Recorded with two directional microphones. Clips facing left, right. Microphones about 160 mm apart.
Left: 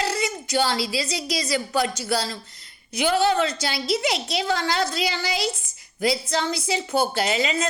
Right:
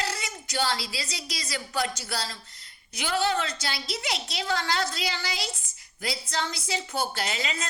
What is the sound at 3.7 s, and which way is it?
Speech, 80° left.